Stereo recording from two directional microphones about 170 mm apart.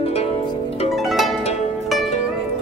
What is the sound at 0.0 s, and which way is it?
Zither, 35° left (ahead or behind).